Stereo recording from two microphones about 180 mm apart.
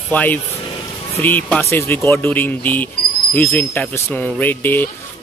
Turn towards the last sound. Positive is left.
turn(degrees=10)  # may be behind; listen again after turning